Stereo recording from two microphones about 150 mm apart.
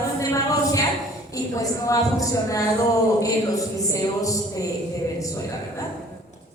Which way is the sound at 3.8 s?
20° left (ahead or behind).